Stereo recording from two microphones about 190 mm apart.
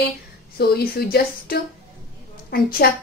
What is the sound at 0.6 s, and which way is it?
A woman's voice, 55° left (ahead or behind).